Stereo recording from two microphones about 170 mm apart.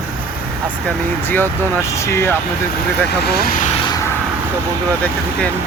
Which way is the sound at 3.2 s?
70° left (ahead or behind).